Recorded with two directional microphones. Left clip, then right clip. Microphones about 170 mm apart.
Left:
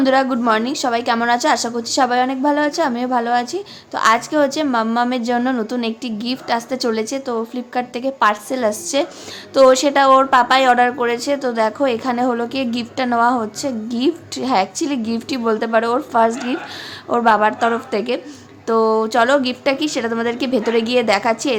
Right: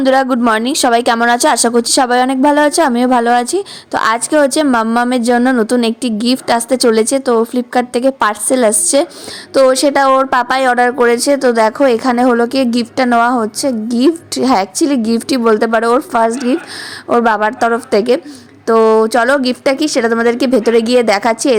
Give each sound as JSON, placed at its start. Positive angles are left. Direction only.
{"t": 0.0, "sound": "a woman's voice", "side_deg": -55}